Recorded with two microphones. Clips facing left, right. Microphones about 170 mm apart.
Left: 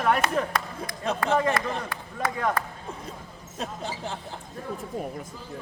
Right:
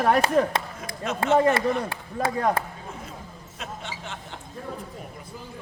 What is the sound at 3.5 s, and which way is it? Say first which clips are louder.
Speech: left 4 dB; 35° left (ahead or behind).